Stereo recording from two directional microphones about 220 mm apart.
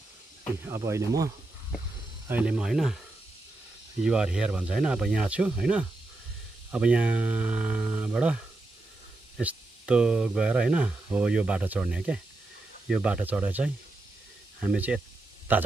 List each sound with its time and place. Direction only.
0.7 s speech: 15° right (ahead or behind)
4.0 s speech: 5° right (ahead or behind)
9.4 s speech: 5° right (ahead or behind)